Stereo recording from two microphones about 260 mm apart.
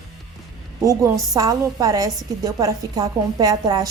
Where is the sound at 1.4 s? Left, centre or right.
Centre.